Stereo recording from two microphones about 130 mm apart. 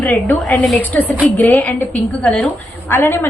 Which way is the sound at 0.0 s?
15° left (ahead or behind).